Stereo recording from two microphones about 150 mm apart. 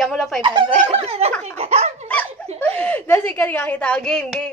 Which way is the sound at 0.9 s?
45° right (ahead or behind).